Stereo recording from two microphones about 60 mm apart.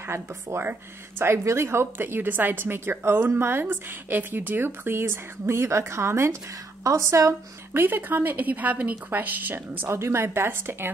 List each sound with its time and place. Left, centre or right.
0.0 s a woman's voice: right
7.7 s a woman's voice: right
9.8 s a woman's voice: right